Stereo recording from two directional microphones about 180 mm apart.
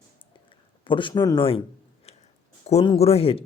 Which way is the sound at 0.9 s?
25° left (ahead or behind).